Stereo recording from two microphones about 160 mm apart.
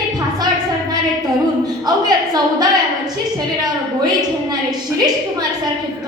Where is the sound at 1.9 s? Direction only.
25° right (ahead or behind).